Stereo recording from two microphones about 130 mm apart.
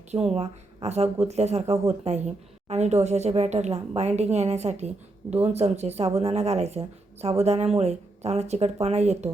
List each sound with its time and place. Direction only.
0.3 s speech: 55° right (ahead or behind)